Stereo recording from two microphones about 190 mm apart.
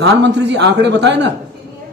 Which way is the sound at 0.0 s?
65° right (ahead or behind).